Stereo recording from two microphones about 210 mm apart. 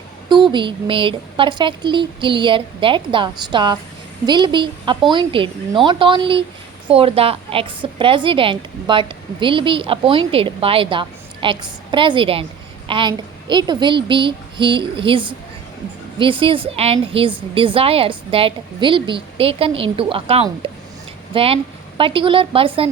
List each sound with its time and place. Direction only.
0.3 s a woman's voice: 20° right (ahead or behind)